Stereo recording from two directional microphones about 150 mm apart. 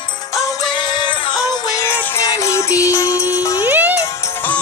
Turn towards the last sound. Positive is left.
turn(degrees=-10)  # may be behind; listen again after turning